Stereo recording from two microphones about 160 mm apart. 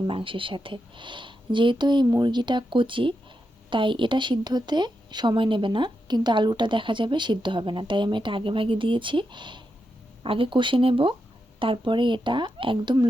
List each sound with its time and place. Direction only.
0.1 s a woman's voice: 35° right (ahead or behind)